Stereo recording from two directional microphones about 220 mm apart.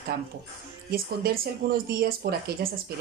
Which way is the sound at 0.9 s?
45° right (ahead or behind).